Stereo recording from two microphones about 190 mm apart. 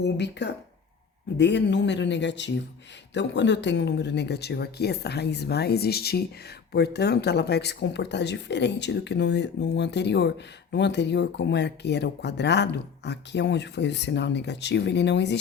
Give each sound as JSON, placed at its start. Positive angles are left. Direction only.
{"t": 0.0, "sound": "speech", "side_deg": 65}